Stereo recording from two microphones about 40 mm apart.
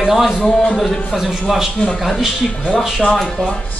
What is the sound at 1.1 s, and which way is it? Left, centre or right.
Speech, centre.